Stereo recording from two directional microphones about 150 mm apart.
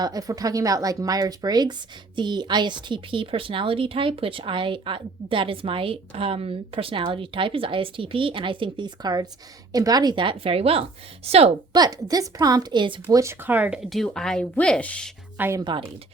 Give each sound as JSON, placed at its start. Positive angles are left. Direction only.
{"t": 0.0, "sound": "a woman's voice", "side_deg": -25}
{"t": 11.7, "sound": "speech", "side_deg": -25}
{"t": 15.4, "sound": "speech", "side_deg": -15}